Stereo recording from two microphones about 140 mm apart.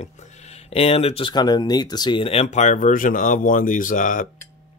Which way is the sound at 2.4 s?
60° left (ahead or behind).